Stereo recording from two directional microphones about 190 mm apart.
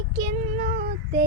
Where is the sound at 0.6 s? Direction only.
45° right (ahead or behind).